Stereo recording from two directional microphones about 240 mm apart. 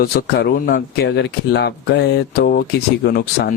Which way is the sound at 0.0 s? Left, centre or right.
Left.